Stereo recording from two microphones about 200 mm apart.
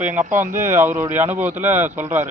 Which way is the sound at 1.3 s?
10° right (ahead or behind).